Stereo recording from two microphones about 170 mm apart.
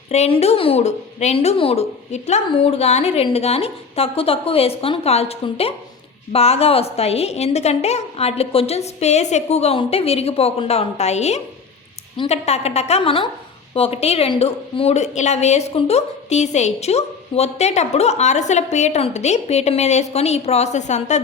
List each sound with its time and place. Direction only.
0.1 s a woman's voice: 40° left (ahead or behind)